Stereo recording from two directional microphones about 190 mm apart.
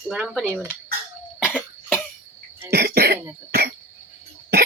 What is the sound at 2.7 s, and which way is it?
Cough, 55° right (ahead or behind).